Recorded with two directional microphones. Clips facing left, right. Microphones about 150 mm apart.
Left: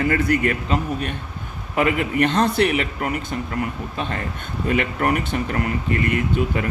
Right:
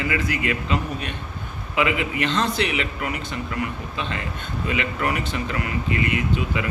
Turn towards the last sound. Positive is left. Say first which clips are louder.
# left 3 dB
turn(degrees=45)  # may be behind; listen again after turning